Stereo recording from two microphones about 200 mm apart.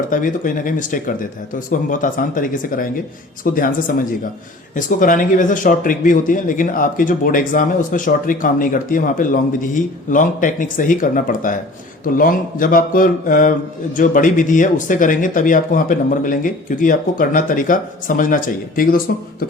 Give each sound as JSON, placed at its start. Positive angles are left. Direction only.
{"t": 0.1, "sound": "speech", "side_deg": 40}